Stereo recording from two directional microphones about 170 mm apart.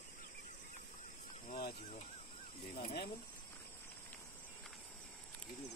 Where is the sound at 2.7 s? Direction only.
65° left (ahead or behind).